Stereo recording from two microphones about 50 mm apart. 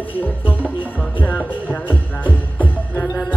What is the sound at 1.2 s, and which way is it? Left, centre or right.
Music, left.